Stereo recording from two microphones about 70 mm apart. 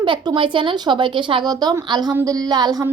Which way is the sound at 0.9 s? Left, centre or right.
Right.